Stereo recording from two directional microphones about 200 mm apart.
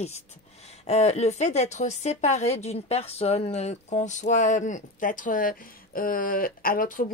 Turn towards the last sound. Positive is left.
turn(degrees=45)  # may be behind; listen again after turning